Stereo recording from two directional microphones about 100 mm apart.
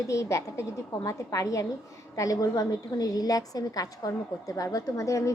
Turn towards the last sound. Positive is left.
turn(degrees=35)  # may be behind; listen again after turning